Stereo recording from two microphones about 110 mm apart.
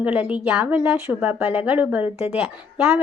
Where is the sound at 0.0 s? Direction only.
15° right (ahead or behind).